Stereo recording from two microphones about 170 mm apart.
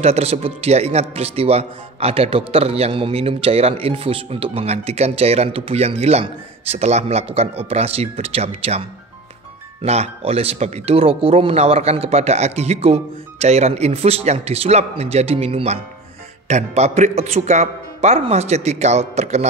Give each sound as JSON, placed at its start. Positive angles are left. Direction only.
{"t": 0.0, "sound": "speech", "side_deg": -35}